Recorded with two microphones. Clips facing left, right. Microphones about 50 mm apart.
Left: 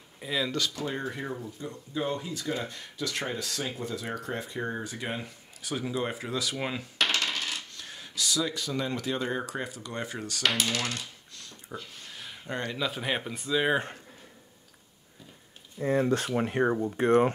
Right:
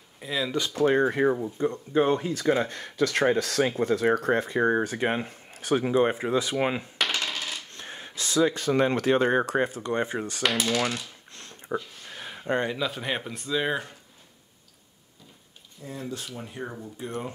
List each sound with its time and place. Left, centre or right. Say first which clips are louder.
0.2 s speech: right 1 dB; centre
0.6 s speech: right 5 dB; right
0.8 s speech: right 12 dB; right
7.0 s coin: left 4 dB; centre
7.7 s speech: right 1 dB; right
10.5 s typewriter: right 4 dB; centre
11.7 s speech: right 10 dB; right
12.1 s a sound: right 9 dB; right
12.7 s speech: right 1 dB; centre
15.8 s speech: left 10 dB; left